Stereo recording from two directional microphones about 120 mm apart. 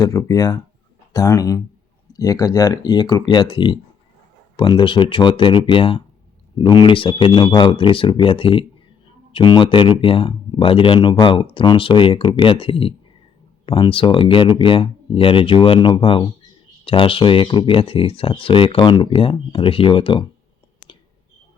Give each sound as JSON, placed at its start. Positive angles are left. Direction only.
{"t": 0.0, "sound": "speech", "side_deg": 30}